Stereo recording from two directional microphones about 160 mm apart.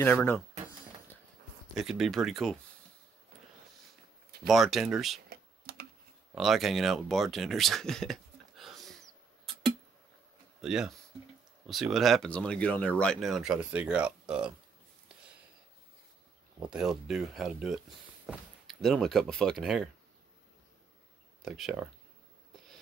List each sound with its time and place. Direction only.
0.0 s speech: 10° left (ahead or behind)
1.8 s speech: centre (ahead or behind)
4.5 s speech: centre (ahead or behind)
5.3 s computer keyboard: 75° right (ahead or behind)
6.3 s speech: centre (ahead or behind)
10.6 s speech: 5° right (ahead or behind)
16.5 s speech: 5° right (ahead or behind)
21.5 s speech: centre (ahead or behind)